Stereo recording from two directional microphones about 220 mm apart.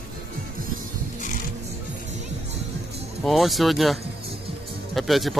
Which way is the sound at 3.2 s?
Centre (ahead or behind).